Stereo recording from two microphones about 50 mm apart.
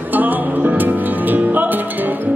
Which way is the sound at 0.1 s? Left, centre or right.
Right.